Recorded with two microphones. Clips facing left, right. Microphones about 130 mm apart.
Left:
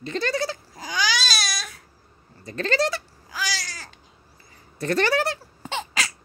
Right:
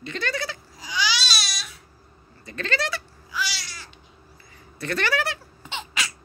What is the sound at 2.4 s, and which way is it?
Goat, 35° left (ahead or behind).